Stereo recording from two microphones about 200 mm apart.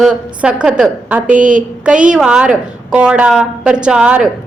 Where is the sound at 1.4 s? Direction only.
40° right (ahead or behind).